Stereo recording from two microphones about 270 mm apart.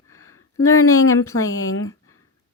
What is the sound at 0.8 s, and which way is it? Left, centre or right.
Speech, left.